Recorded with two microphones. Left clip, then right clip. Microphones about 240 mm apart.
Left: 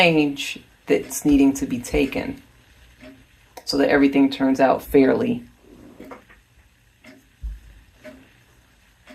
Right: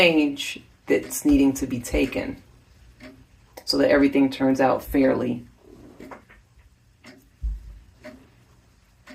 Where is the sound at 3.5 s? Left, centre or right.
Left.